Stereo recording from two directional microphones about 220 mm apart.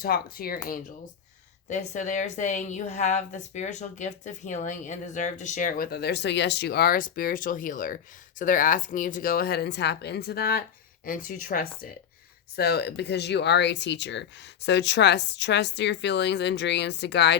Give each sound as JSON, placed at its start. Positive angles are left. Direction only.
{"t": 0.0, "sound": "a woman's voice", "side_deg": 40}